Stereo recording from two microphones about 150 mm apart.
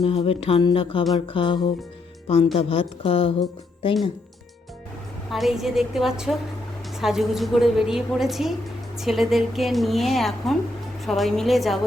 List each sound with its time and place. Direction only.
0.0 s speech: 40° left (ahead or behind)
5.3 s a woman's voice: centre (ahead or behind)